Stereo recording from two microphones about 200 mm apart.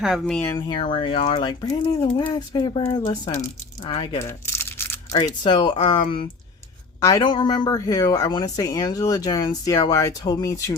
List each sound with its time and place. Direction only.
0.0 s speech: centre (ahead or behind)
0.5 s speech: 20° left (ahead or behind)
4.2 s crumpling: 10° left (ahead or behind)
5.2 s speech: 20° left (ahead or behind)
7.0 s speech: 20° left (ahead or behind)